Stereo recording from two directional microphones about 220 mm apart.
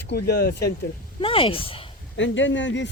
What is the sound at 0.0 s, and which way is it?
Speech, 50° left (ahead or behind).